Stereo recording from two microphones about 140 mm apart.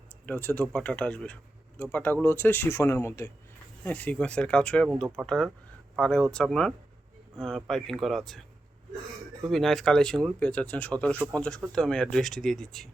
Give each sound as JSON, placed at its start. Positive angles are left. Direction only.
{"t": 0.3, "sound": "speech", "side_deg": 10}
{"t": 9.5, "sound": "speech", "side_deg": 0}